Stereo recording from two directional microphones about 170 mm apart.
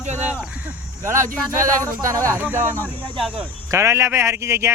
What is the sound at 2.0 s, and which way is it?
Speech, 20° right (ahead or behind).